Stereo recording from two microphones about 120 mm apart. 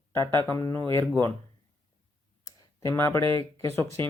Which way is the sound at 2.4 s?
30° left (ahead or behind).